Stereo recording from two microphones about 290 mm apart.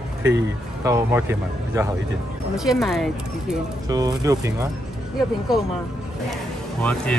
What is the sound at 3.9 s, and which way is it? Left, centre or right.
Speech, centre.